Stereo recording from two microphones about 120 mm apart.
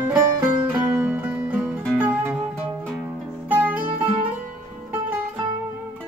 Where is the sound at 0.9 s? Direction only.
10° right (ahead or behind).